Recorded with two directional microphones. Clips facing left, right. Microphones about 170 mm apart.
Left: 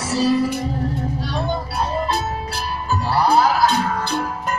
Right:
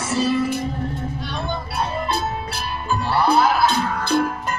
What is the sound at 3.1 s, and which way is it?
Music, 40° left (ahead or behind).